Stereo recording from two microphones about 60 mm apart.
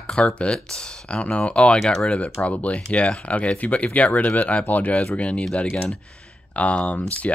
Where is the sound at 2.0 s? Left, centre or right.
Left.